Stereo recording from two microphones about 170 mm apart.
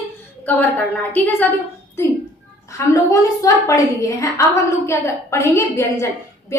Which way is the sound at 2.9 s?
20° left (ahead or behind).